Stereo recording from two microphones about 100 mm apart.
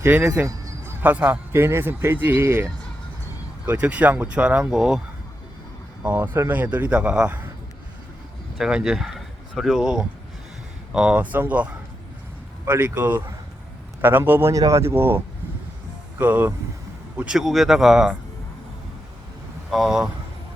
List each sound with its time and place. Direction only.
0.0 s a man's voice: 15° right (ahead or behind)
3.7 s speech: 15° right (ahead or behind)
6.0 s speech: 15° right (ahead or behind)
8.5 s a man's voice: 5° right (ahead or behind); by 14.5 s 20° right (ahead or behind)
14.5 s a man's voice: 35° right (ahead or behind)
16.2 s a man's voice: 20° right (ahead or behind)
17.2 s speech: 5° right (ahead or behind)
19.7 s speech: 5° right (ahead or behind)